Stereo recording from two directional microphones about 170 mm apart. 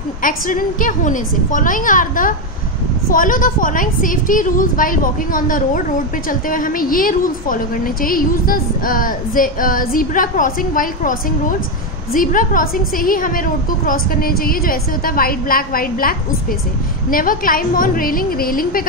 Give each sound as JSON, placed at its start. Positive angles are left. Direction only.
{"t": 0.2, "sound": "a woman's voice", "side_deg": 55}